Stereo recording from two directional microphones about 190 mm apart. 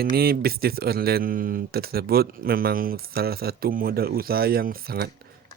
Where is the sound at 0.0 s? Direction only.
55° right (ahead or behind).